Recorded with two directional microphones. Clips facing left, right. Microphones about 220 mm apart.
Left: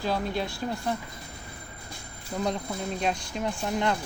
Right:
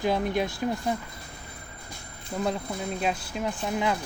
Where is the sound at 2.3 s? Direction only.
5° right (ahead or behind).